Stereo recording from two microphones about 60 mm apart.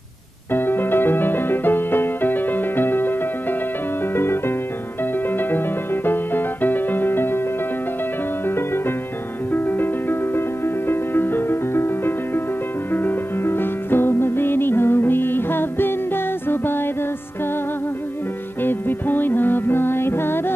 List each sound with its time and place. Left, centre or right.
0.5 s music: left
8.5 s music: left
18.6 s music: left